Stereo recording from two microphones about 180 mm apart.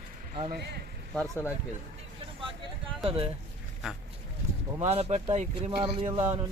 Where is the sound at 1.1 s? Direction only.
10° left (ahead or behind).